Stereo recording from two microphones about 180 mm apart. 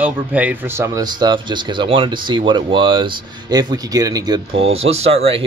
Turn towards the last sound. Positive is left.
turn(degrees=-35)  # may be behind; listen again after turning